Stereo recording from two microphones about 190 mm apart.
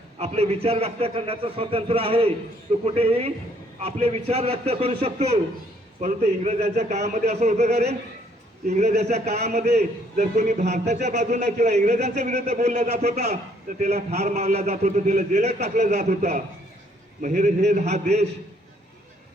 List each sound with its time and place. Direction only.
0.2 s speech: 35° right (ahead or behind)